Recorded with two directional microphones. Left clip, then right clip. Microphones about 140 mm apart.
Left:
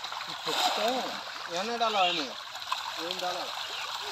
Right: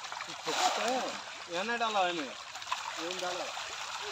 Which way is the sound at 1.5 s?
90° left.